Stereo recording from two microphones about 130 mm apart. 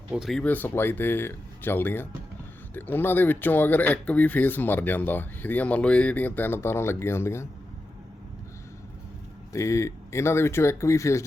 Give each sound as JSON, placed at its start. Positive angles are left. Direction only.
{"t": 0.1, "sound": "speech", "side_deg": 0}
{"t": 0.4, "sound": "speech", "side_deg": 15}
{"t": 9.5, "sound": "speech", "side_deg": 25}